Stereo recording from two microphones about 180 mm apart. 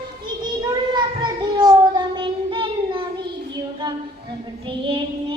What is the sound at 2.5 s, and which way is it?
Child singing, 30° right (ahead or behind).